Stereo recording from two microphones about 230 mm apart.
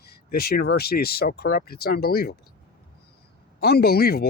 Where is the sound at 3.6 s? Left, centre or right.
Left.